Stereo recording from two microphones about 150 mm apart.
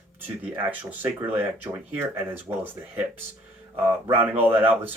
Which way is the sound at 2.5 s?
30° right (ahead or behind).